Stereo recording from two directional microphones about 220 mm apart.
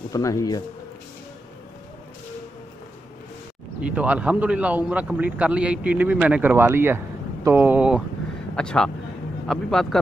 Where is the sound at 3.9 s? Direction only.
5° right (ahead or behind).